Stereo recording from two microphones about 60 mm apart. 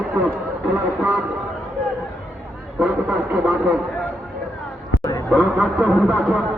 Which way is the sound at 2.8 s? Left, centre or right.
Centre.